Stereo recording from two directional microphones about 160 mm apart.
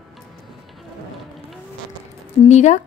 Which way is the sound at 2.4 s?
45° left (ahead or behind).